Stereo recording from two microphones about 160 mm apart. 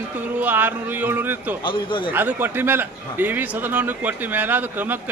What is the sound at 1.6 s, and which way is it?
Speech, 30° left (ahead or behind).